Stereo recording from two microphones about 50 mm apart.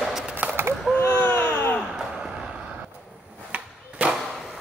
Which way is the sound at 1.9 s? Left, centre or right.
Centre.